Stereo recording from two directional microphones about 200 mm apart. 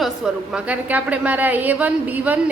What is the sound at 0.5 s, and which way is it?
A woman's voice, 5° right (ahead or behind).